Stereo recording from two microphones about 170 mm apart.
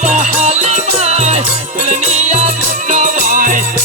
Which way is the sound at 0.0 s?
45° right (ahead or behind).